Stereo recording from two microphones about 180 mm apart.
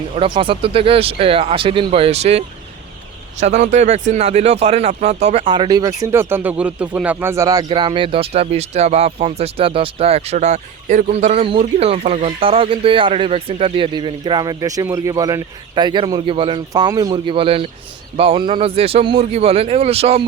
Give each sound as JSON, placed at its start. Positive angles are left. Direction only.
{"t": 0.2, "sound": "speech", "side_deg": -30}